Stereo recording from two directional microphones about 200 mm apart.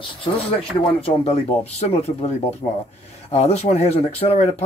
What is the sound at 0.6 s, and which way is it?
Speech, 30° left (ahead or behind).